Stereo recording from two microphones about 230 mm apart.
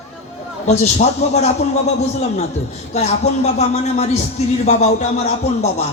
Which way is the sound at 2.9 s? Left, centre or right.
Left.